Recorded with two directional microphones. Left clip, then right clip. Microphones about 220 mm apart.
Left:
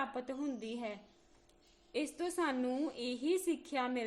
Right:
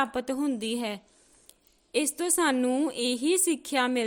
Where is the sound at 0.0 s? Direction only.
40° right (ahead or behind).